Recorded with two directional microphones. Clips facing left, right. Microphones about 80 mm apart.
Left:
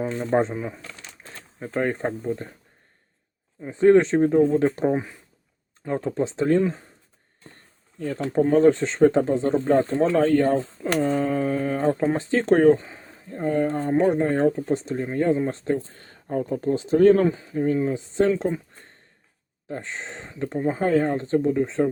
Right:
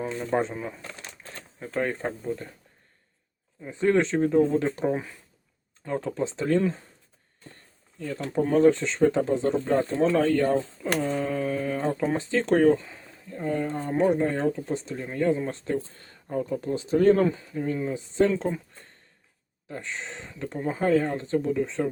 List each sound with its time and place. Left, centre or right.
0.0 s speech: left
0.5 s speech: centre
3.6 s speech: left
6.6 s speech: left
8.0 s speech: left
19.6 s speech: left